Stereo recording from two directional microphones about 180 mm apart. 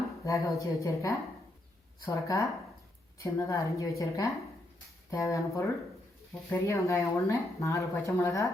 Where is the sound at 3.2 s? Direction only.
15° left (ahead or behind).